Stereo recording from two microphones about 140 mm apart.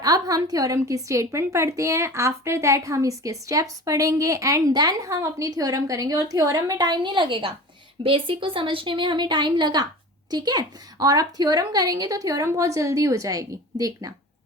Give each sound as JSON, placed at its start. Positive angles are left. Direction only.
{"t": 0.0, "sound": "a woman's voice", "side_deg": -25}